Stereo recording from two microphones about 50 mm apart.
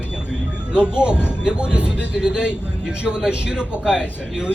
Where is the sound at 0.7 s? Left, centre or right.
Centre.